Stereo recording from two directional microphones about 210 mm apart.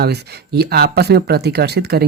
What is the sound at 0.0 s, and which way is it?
Speech, 50° right (ahead or behind).